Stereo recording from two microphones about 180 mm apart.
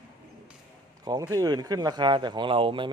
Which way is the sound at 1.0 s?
20° right (ahead or behind).